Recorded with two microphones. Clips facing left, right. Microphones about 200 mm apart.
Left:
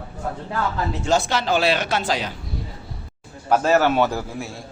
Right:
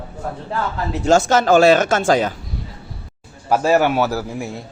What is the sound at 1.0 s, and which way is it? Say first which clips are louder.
A man's voice: right 8 dB; 45° right (ahead or behind).